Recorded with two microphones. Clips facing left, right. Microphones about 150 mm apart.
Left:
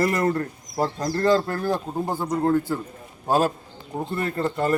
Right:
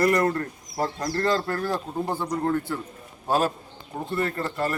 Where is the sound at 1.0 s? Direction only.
15° left (ahead or behind).